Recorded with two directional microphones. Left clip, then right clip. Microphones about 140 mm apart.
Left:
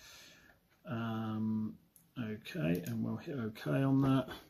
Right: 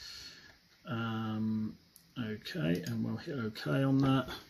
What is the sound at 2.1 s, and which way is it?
Speech, 15° right (ahead or behind).